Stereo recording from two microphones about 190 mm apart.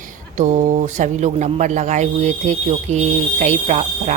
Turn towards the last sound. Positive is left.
turn(degrees=-40)  # may be behind; listen again after turning